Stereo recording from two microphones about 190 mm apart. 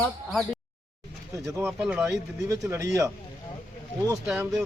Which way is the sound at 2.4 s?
15° right (ahead or behind).